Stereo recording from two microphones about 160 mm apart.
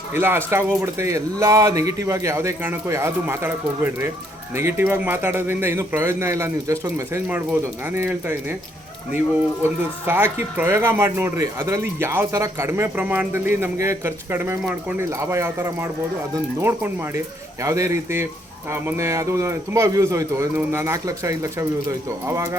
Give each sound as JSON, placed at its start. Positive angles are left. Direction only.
{"t": 0.1, "sound": "speech", "side_deg": -15}
{"t": 10.1, "sound": "a man's voice", "side_deg": -15}